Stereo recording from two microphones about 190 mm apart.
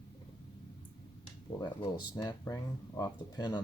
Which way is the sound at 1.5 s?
25° left (ahead or behind).